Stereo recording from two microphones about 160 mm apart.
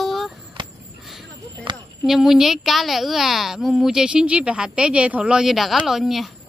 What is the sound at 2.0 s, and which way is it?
Speech, centre (ahead or behind).